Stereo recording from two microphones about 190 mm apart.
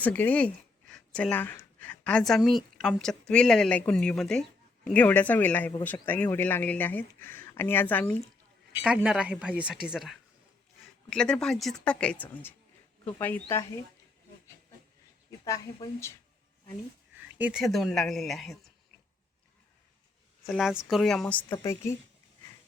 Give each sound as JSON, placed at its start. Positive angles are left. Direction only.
{"t": 0.0, "sound": "speech", "side_deg": 10}
{"t": 8.8, "sound": "speech", "side_deg": -5}
{"t": 15.4, "sound": "speech", "side_deg": 15}
{"t": 17.3, "sound": "speech", "side_deg": -5}
{"t": 20.5, "sound": "speech", "side_deg": 0}